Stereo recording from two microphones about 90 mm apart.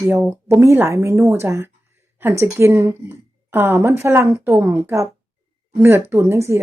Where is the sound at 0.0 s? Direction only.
25° right (ahead or behind).